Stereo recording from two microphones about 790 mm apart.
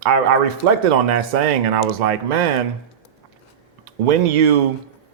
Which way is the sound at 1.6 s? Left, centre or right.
Right.